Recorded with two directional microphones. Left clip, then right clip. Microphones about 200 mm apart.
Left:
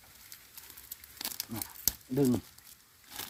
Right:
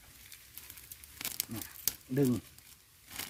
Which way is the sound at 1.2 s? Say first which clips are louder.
Left 1 dB; 5° right (ahead or behind).